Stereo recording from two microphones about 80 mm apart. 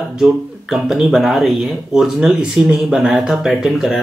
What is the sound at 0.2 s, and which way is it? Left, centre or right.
Speech, centre.